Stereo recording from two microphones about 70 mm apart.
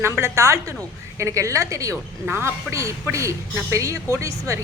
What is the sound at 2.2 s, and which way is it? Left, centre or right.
Speech, right.